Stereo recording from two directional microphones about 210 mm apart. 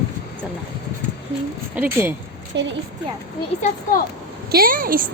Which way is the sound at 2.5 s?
60° right (ahead or behind).